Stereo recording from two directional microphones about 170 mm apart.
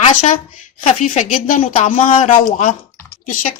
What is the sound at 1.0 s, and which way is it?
Speech, 50° left (ahead or behind).